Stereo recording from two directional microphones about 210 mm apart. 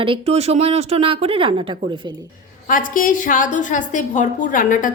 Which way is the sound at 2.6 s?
40° left (ahead or behind).